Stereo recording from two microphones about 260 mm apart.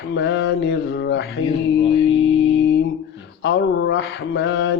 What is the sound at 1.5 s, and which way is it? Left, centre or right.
Music, left.